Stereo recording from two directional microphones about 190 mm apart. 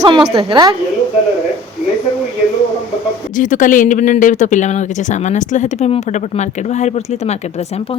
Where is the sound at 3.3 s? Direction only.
40° left (ahead or behind).